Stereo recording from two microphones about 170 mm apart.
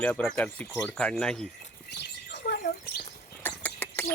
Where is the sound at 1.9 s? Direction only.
80° left.